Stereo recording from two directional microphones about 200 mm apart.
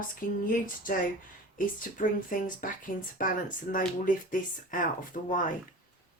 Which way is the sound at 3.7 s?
45° left (ahead or behind).